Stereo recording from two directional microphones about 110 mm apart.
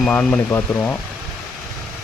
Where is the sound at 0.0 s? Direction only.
10° left (ahead or behind).